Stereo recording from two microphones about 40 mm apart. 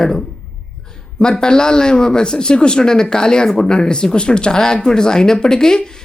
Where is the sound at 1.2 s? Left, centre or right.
Centre.